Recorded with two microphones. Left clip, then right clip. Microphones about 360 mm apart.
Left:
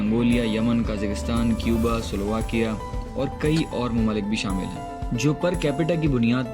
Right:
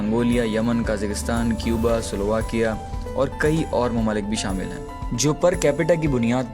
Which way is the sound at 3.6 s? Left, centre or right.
Centre.